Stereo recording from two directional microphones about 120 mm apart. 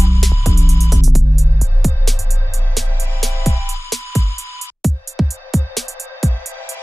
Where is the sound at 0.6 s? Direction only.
25° left (ahead or behind).